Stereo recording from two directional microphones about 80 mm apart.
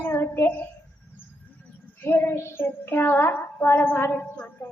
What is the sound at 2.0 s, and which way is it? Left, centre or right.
A woman's voice, left.